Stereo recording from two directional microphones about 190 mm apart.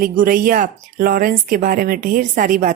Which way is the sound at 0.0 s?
45° right (ahead or behind).